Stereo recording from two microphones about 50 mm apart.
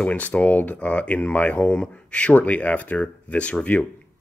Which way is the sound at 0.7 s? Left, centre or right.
Left.